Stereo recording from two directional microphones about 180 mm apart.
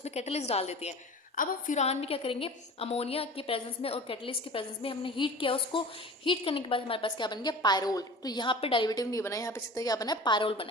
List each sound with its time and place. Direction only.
0.0 s a woman's voice: 35° left (ahead or behind)